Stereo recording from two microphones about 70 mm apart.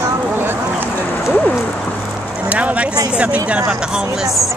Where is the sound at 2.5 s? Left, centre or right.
Centre.